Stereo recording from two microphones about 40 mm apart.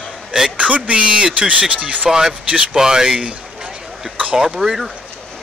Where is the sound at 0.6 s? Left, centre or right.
Right.